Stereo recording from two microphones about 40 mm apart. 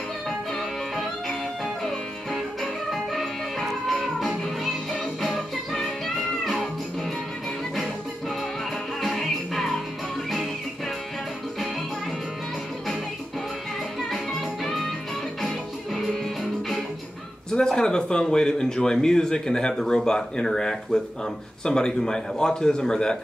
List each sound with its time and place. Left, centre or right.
0.5 s music: centre
9.0 s music: centre
14.1 s music: centre
17.5 s speech: centre